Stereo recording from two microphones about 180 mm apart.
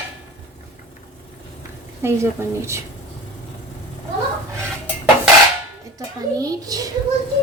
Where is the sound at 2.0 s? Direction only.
15° right (ahead or behind).